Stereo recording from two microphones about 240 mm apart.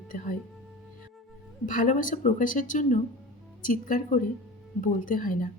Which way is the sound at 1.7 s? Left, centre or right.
Left.